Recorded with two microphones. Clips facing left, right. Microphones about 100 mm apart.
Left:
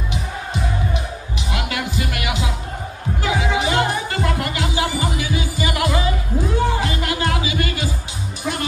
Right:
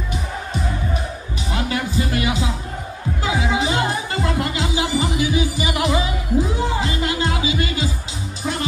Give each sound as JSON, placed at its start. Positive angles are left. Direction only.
{"t": 1.5, "sound": "music", "side_deg": -30}